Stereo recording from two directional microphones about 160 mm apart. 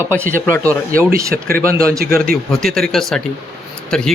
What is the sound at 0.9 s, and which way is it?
Speech, 60° right (ahead or behind).